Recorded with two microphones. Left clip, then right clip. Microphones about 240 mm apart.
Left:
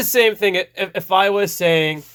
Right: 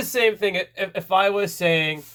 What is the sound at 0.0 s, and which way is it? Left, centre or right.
Speech, left.